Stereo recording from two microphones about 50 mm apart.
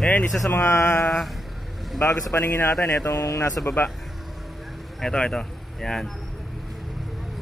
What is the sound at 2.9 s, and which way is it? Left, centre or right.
Speech, left.